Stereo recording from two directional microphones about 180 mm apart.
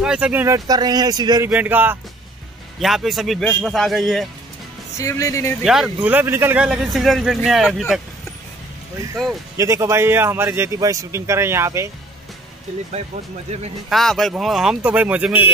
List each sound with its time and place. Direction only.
0.0 s speech: 5° right (ahead or behind); by 1.5 s 20° right (ahead or behind)
1.5 s a man's voice: 10° right (ahead or behind)
4.9 s speech: 15° left (ahead or behind)
5.7 s a man's voice: 5° right (ahead or behind)
9.6 s a man's voice: 15° right (ahead or behind)
13.5 s speech: 40° right (ahead or behind)
13.8 s a man's voice: centre (ahead or behind)